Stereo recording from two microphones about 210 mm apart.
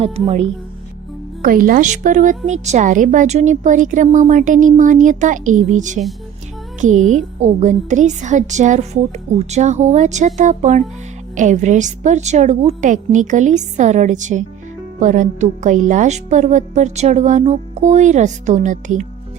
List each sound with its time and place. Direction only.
1.4 s a woman's voice: 40° right (ahead or behind)